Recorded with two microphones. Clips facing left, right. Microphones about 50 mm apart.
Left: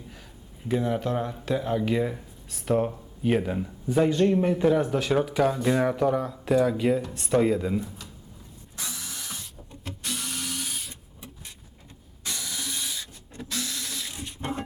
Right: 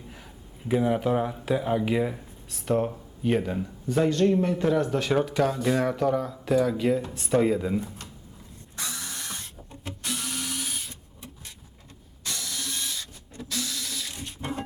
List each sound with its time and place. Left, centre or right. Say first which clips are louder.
0.7 s speech: right 2 dB; centre
8.8 s mechanisms: right 2 dB; right
9.8 s tools: right 1 dB; centre
12.2 s ratchet: even; centre
13.3 s a sound: even; left
14.1 s printer: even; centre